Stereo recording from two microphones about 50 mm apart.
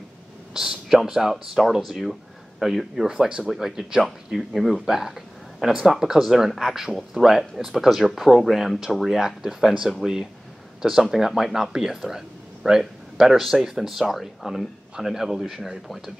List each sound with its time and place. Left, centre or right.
0.6 s speech: centre
3.1 s speech: centre
3.4 s speech: centre